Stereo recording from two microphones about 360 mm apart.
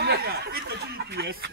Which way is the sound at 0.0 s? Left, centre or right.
Right.